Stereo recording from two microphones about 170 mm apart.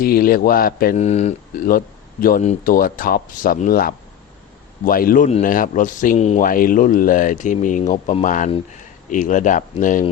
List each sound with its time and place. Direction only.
0.0 s speech: 60° left (ahead or behind)
0.9 s speech: 40° left (ahead or behind)